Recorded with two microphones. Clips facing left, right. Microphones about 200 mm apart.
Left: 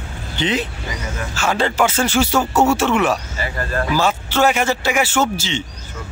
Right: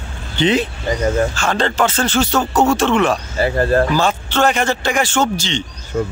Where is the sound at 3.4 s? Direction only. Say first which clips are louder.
Right 9 dB; 40° right (ahead or behind).